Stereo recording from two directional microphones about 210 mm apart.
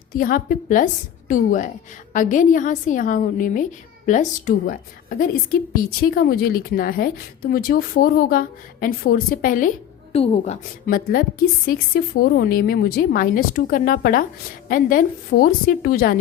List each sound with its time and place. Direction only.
0.2 s a woman's voice: 40° left (ahead or behind)